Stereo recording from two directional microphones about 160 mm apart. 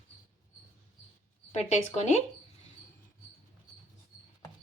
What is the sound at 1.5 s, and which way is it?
Speech, 45° left (ahead or behind).